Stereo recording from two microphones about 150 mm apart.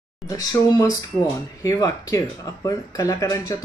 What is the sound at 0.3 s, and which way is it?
Speech, 25° left (ahead or behind).